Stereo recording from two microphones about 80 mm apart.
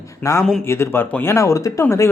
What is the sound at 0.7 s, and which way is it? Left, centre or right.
Speech, left.